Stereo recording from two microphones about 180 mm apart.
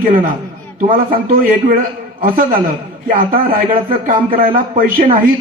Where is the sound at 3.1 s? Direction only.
50° right (ahead or behind).